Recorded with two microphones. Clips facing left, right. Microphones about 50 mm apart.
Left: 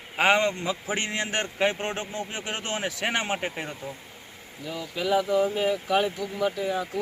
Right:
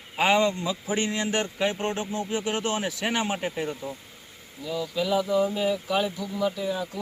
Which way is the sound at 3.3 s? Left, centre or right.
Left.